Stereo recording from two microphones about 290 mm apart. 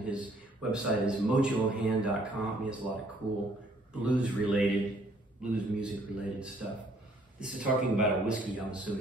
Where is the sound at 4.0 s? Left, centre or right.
Centre.